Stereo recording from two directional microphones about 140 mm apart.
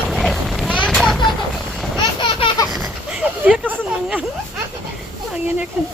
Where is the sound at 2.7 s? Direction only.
5° right (ahead or behind).